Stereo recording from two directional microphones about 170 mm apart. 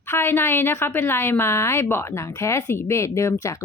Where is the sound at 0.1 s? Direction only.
15° left (ahead or behind).